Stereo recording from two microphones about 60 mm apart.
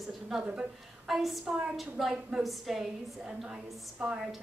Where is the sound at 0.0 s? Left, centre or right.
Centre.